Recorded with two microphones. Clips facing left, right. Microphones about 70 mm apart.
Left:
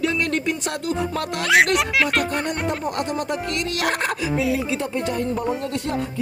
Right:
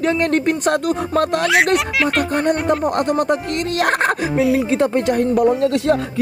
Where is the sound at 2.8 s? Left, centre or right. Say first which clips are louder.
Right 7 dB; right.